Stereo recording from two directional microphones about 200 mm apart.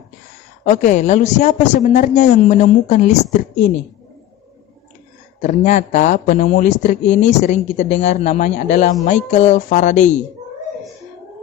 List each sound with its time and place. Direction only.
0.6 s speech: 40° left (ahead or behind)
5.4 s speech: 40° left (ahead or behind)